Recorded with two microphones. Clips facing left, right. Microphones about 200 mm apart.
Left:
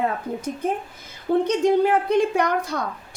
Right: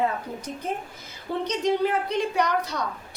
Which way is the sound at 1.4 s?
50° left (ahead or behind).